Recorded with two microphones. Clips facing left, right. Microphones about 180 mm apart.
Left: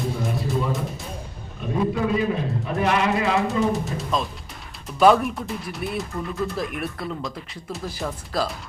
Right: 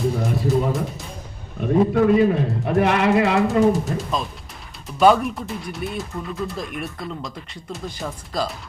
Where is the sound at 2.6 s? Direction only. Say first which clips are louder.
Right 4 dB; 60° right (ahead or behind).